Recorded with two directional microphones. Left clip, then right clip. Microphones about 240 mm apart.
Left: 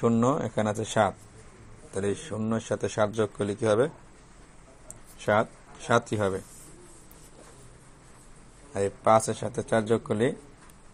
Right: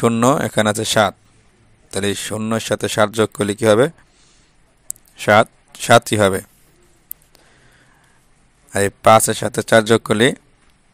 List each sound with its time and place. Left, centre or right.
0.0 s speech: right
5.2 s speech: right
8.7 s speech: right